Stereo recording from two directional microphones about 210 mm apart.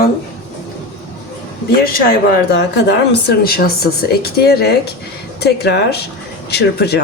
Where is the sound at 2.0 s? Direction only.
50° left (ahead or behind).